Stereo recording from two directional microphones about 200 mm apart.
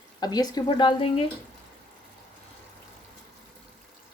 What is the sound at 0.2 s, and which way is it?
Speech, 20° left (ahead or behind).